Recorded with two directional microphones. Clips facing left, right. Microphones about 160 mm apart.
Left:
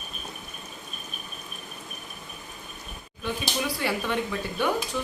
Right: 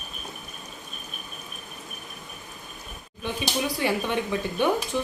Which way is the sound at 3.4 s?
20° right (ahead or behind).